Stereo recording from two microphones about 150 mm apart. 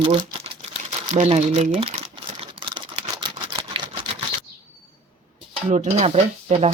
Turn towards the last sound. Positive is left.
turn(degrees=-45)  # may be behind; listen again after turning